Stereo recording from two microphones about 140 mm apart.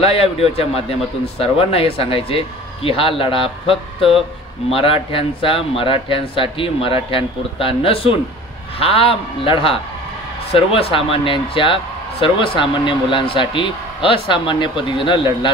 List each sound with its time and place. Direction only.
0.0 s a man's voice: 45° left (ahead or behind)